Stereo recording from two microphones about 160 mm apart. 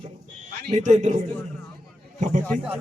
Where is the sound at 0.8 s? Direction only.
50° right (ahead or behind).